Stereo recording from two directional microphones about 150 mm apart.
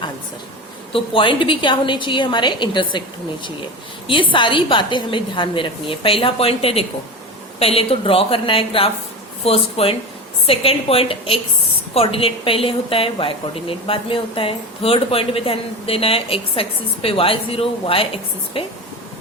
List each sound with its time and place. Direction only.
0.9 s a woman's voice: 35° left (ahead or behind)
4.0 s a woman's voice: 35° left (ahead or behind)